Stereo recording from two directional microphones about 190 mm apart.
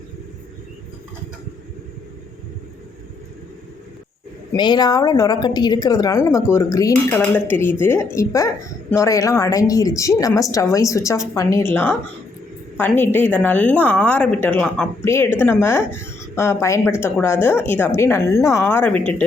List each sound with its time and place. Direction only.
4.5 s a woman's voice: 20° left (ahead or behind)